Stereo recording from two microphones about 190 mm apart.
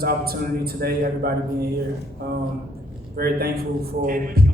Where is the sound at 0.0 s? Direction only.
55° right (ahead or behind).